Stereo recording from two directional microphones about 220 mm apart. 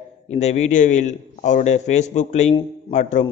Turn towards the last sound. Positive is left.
turn(degrees=35)  # may be behind; listen again after turning